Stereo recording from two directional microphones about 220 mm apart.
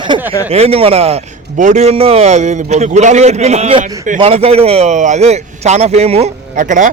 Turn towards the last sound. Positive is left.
turn(degrees=-35)  # may be behind; listen again after turning